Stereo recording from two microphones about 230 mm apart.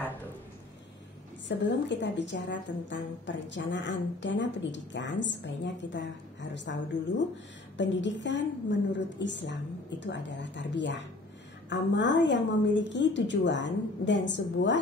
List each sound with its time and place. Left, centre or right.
1.6 s a woman's voice: left